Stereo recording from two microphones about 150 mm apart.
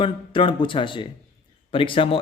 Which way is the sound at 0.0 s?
35° left (ahead or behind).